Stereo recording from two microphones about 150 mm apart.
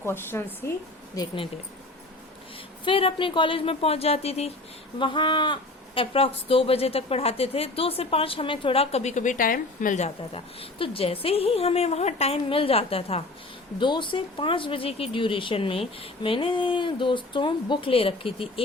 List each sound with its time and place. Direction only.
0.0 s a woman's voice: 15° left (ahead or behind)
1.1 s speech: 25° left (ahead or behind)
2.8 s speech: 35° left (ahead or behind)
4.9 s speech: 30° left (ahead or behind)